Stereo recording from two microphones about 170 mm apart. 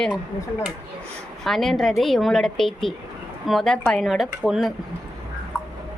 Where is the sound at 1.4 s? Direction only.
Centre (ahead or behind).